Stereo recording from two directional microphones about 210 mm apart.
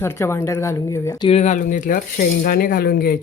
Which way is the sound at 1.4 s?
35° left (ahead or behind).